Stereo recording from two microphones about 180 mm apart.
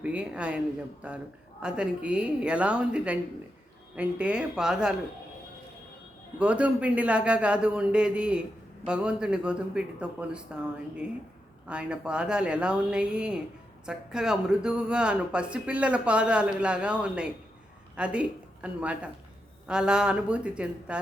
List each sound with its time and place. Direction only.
0.0 s a man's voice: 5° right (ahead or behind)
6.4 s a man's voice: 5° right (ahead or behind)